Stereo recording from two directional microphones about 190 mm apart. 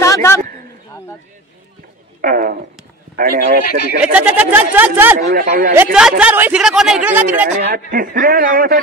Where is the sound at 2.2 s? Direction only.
45° right (ahead or behind).